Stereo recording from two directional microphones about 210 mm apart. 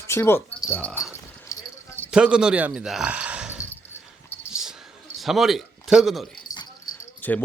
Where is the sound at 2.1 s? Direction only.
5° right (ahead or behind).